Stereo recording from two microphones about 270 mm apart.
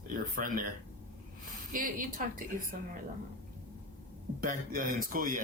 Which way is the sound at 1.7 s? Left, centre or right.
Right.